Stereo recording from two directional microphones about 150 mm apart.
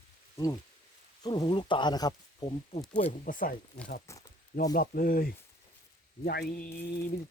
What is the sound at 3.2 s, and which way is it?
Speech, 65° left (ahead or behind).